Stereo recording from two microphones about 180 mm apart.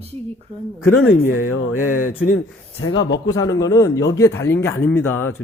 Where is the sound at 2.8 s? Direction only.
85° left.